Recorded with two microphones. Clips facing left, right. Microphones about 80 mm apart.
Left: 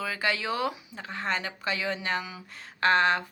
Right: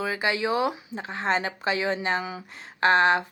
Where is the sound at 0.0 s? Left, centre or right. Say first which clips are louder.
Right 4 dB; right.